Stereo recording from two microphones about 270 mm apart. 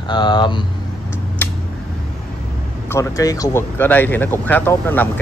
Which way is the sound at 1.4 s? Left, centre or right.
Centre.